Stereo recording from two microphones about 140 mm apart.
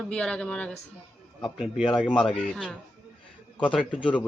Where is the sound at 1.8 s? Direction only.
35° left (ahead or behind).